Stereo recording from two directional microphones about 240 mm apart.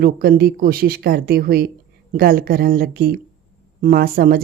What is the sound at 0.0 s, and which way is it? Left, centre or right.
Speech, right.